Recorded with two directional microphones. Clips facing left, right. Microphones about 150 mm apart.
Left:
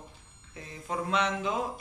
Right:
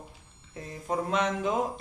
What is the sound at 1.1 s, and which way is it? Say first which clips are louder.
Speech: right 1 dB; 45° right (ahead or behind).